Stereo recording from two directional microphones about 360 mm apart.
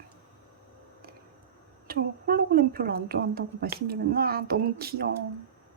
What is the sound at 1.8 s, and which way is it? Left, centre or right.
Speech, right.